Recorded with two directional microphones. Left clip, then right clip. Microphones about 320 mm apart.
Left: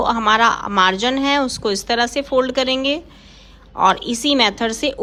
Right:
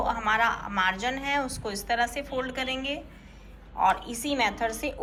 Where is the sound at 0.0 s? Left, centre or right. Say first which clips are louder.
Left 10 dB; centre.